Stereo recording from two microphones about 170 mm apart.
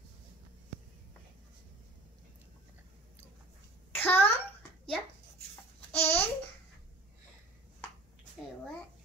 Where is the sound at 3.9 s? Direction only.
10° left (ahead or behind).